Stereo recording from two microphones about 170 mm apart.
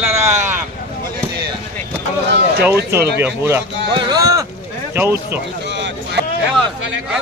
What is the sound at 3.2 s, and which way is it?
Speech, 15° right (ahead or behind).